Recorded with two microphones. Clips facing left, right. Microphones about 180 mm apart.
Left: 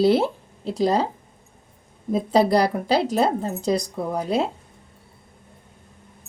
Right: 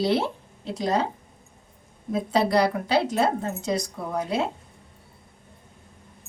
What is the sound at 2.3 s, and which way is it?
Speech, 35° left (ahead or behind).